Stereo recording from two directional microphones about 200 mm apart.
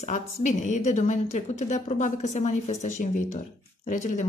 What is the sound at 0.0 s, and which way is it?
A woman's voice, 35° left (ahead or behind).